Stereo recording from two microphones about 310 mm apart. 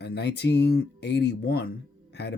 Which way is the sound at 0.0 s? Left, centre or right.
Left.